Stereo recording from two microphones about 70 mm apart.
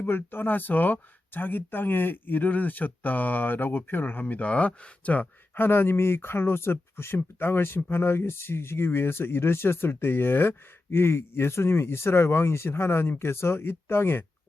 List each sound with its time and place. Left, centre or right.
0.0 s speech: left
5.5 s speech: left